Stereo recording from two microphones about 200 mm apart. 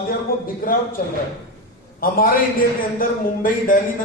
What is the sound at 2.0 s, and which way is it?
A man's voice, 45° left (ahead or behind).